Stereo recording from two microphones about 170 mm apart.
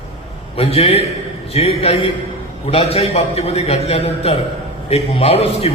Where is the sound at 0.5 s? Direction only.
35° left (ahead or behind).